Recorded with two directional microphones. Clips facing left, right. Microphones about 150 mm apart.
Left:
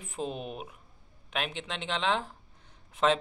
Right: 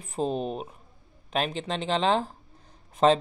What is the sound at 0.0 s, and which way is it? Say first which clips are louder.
Speech: right 7 dB; 35° right (ahead or behind).